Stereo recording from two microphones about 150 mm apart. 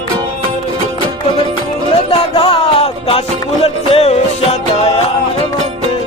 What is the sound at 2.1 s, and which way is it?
Music, 45° left (ahead or behind).